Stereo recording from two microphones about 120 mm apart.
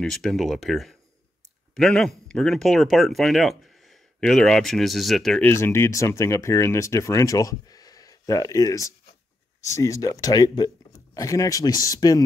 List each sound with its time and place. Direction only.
0.0 s speech: 5° left (ahead or behind)
5.4 s speech: 20° left (ahead or behind)